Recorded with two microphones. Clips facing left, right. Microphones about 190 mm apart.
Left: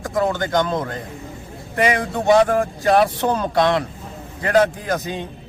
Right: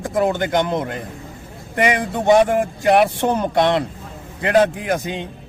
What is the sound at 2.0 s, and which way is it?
A man's voice, 20° right (ahead or behind).